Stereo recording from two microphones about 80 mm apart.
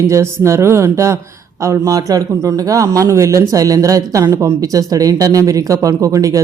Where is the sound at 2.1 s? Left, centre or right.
Right.